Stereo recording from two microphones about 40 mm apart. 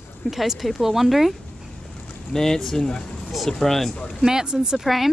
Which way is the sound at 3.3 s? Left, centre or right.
Centre.